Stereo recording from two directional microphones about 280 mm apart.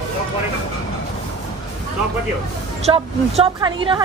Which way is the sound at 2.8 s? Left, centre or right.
Centre.